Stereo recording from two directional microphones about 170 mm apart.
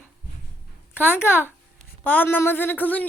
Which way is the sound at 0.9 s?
10° left (ahead or behind).